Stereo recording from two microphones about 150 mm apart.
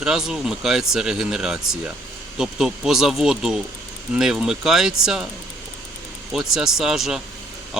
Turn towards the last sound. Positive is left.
turn(degrees=0)  # may be behind; listen again after turning